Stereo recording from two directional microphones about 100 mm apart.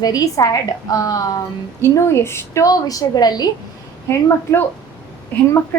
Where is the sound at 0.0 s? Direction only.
40° left (ahead or behind).